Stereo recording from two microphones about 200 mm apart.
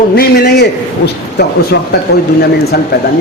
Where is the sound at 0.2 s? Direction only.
50° left (ahead or behind).